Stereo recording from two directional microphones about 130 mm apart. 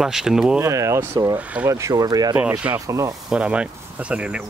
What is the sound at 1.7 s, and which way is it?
Speech, 25° right (ahead or behind).